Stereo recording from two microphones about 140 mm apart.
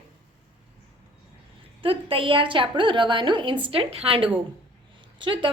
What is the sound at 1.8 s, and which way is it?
A woman's voice, 40° right (ahead or behind).